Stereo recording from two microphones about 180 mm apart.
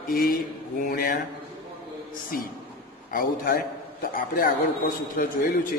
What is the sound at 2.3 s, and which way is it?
A man's voice, 50° left (ahead or behind).